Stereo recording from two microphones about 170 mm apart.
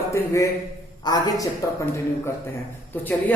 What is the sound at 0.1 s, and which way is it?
A man's voice, 20° left (ahead or behind).